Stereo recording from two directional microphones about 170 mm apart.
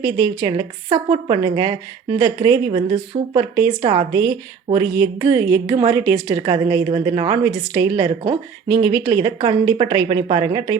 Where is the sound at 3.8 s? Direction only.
30° right (ahead or behind).